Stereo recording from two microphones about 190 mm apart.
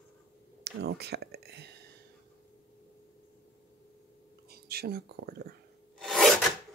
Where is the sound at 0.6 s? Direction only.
60° right (ahead or behind).